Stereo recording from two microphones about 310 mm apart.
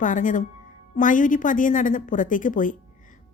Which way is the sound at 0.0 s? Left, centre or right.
Left.